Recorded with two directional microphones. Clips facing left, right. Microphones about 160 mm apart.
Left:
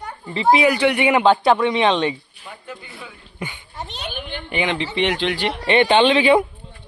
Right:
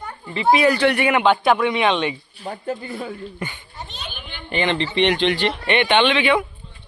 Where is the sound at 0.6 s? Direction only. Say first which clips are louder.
Even; 15° left (ahead or behind).